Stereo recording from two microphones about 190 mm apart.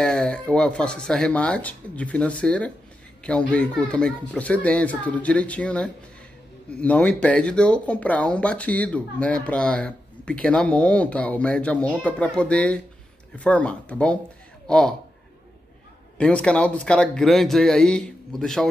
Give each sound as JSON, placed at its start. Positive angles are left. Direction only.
{"t": 0.0, "sound": "speech", "side_deg": 5}
{"t": 16.2, "sound": "speech", "side_deg": 5}